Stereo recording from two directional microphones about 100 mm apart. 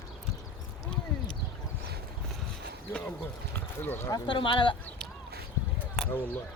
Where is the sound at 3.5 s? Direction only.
20° left (ahead or behind).